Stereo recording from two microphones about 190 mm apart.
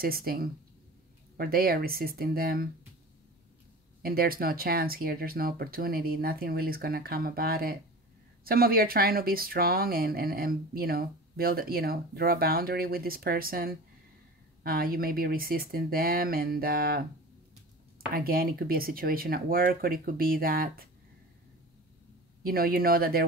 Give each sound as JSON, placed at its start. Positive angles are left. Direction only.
{"t": 0.0, "sound": "speech", "side_deg": -50}
{"t": 4.0, "sound": "speech", "side_deg": -50}
{"t": 18.1, "sound": "speech", "side_deg": -50}
{"t": 22.4, "sound": "speech", "side_deg": -50}